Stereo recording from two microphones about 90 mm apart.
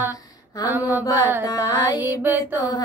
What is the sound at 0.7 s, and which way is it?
Music, 20° right (ahead or behind).